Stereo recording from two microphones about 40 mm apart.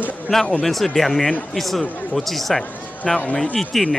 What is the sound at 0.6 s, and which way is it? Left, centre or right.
Speech, centre.